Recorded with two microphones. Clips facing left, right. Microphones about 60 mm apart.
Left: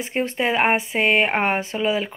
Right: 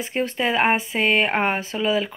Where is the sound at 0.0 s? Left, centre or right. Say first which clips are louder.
Left 1 dB; left.